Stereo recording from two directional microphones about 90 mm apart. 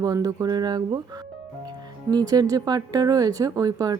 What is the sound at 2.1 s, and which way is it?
Speech, 45° right (ahead or behind).